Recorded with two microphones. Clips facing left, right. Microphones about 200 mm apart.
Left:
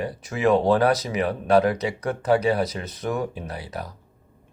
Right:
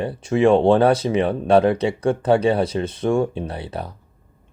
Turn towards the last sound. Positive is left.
turn(degrees=-30)  # may be behind; listen again after turning